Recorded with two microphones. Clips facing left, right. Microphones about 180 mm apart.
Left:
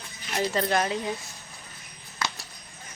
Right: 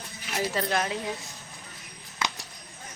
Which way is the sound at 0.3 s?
5° right (ahead or behind).